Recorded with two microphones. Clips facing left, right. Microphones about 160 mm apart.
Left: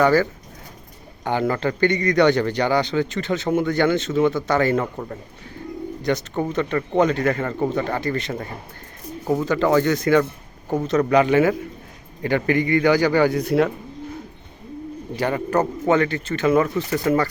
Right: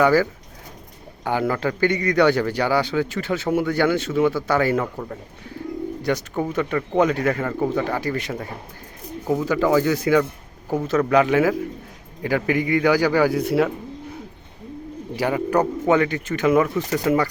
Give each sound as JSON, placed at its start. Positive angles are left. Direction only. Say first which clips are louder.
{"t": 0.0, "sound": "speech", "louder": "even", "side_deg": -10}
{"t": 6.0, "sound": "a man's voice", "louder": "left 2 dB", "side_deg": -10}
{"t": 15.1, "sound": "speech", "louder": "right 1 dB", "side_deg": -10}